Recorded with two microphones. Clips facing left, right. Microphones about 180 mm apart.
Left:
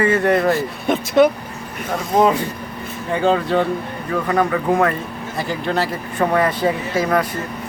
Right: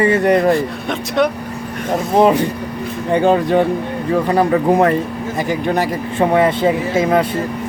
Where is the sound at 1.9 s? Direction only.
20° right (ahead or behind).